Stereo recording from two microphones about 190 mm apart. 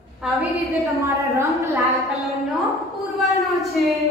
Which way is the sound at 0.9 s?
15° right (ahead or behind).